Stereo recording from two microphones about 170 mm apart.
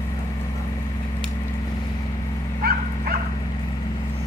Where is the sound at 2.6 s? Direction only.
60° right (ahead or behind).